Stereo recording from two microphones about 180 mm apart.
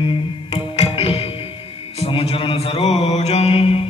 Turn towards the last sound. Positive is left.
turn(degrees=35)  # may be behind; listen again after turning